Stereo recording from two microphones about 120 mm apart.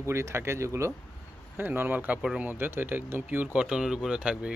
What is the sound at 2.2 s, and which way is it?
Speech, 5° right (ahead or behind).